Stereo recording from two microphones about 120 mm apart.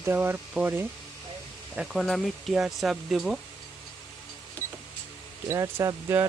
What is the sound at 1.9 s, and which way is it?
Speech, 5° left (ahead or behind).